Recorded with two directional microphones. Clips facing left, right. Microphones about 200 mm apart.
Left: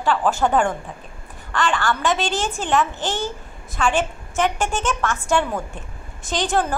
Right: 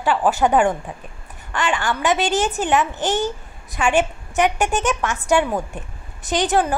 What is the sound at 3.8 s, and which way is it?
A woman's voice, 15° right (ahead or behind).